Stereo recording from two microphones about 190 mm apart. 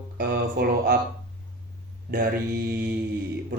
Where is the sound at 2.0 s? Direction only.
50° right (ahead or behind).